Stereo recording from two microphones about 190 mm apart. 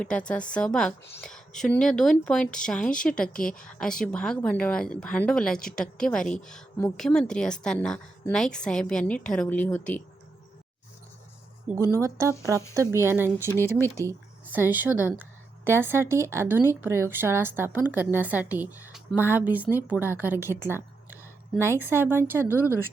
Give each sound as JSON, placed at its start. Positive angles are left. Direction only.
{"t": 0.0, "sound": "speech", "side_deg": 5}
{"t": 11.7, "sound": "a woman's voice", "side_deg": -15}